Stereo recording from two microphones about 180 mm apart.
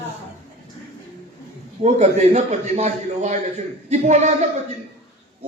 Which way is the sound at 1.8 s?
40° right (ahead or behind).